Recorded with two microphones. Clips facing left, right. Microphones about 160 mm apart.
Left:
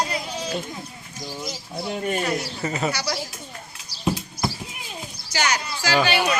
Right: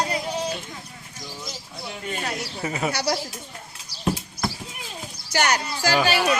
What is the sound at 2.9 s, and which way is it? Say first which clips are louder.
Speech: right 3 dB; 55° right (ahead or behind).